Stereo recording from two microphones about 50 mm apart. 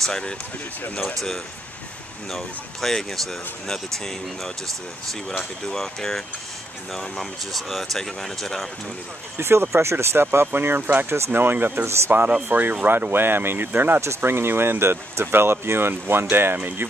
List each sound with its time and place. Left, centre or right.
1.1 s speech: centre
5.7 s speech: centre
9.4 s speech: right
10.3 s speech: right
16.5 s speech: right